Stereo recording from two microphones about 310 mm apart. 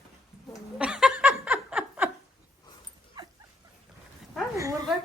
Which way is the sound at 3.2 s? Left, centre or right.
Centre.